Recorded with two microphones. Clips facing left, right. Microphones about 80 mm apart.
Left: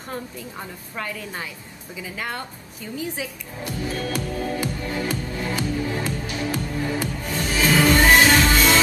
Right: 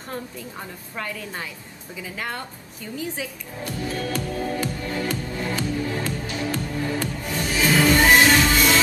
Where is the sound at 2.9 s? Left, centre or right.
Centre.